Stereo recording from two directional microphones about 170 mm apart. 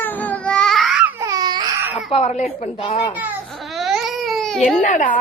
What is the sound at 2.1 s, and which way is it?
A woman's voice, 40° left (ahead or behind).